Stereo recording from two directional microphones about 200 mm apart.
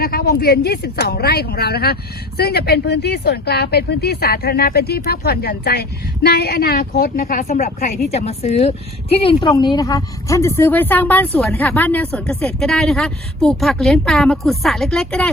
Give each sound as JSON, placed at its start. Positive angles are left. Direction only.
{"t": 0.0, "sound": "a woman's voice", "side_deg": 50}
{"t": 8.1, "sound": "speech", "side_deg": 30}